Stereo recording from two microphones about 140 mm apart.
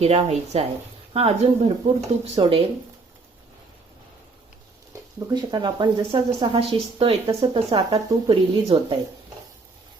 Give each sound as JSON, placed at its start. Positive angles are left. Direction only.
{"t": 0.0, "sound": "speech", "side_deg": -50}
{"t": 5.3, "sound": "speech", "side_deg": -30}